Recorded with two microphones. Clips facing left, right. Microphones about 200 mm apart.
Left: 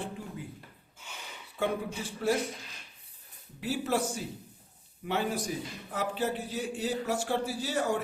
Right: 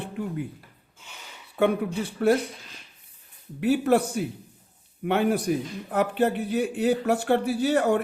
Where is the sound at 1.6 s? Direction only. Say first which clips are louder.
Right 8 dB; 60° right (ahead or behind).